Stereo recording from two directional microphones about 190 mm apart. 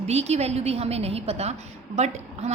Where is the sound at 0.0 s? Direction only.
35° right (ahead or behind).